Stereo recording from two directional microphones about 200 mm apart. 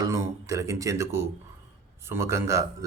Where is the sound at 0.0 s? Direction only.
15° right (ahead or behind).